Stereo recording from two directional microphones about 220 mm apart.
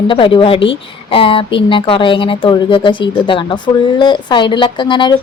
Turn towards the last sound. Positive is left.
turn(degrees=20)  # may be behind; listen again after turning